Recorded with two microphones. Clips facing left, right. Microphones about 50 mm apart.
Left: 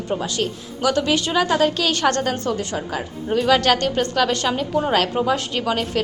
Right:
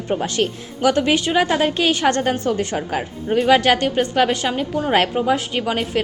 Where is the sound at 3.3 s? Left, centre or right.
Right.